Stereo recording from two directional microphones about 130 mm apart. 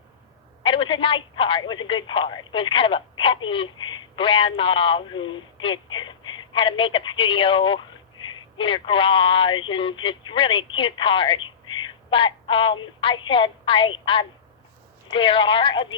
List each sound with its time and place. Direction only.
0.6 s a woman's voice: 40° left (ahead or behind)